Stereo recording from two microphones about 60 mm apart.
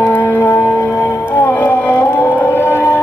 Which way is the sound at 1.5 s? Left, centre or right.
Left.